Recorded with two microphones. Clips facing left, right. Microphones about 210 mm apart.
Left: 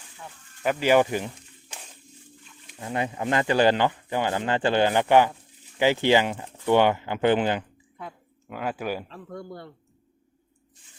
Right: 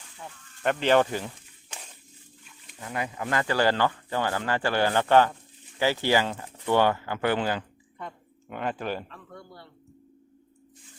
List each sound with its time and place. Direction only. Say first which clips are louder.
0.6 s speech: left 2 dB; 5° left (ahead or behind)
2.8 s speech: left 4 dB; 25° left (ahead or behind)
7.9 s speech: even; 5° left (ahead or behind)
9.0 s speech: left 8 dB; 40° left (ahead or behind)